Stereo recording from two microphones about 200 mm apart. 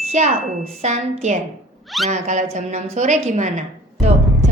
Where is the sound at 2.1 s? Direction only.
35° right (ahead or behind).